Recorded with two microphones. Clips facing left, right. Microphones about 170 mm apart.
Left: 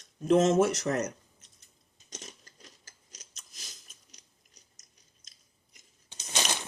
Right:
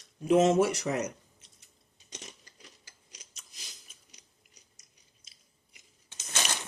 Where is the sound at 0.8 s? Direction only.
5° right (ahead or behind).